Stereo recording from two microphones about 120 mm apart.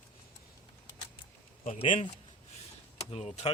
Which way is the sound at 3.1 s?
60° left (ahead or behind).